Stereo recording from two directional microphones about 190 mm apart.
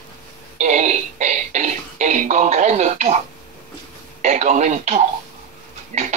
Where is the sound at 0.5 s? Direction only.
40° right (ahead or behind).